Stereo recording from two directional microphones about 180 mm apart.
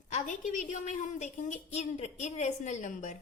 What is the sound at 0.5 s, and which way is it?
Speech, 45° left (ahead or behind).